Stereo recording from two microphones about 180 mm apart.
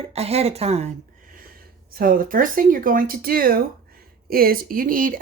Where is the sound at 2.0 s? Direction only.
50° right (ahead or behind).